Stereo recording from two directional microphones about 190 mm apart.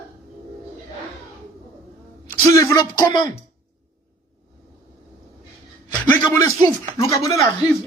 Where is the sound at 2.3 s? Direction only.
15° left (ahead or behind).